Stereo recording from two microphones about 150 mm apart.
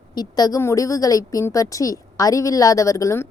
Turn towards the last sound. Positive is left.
turn(degrees=20)  # may be behind; listen again after turning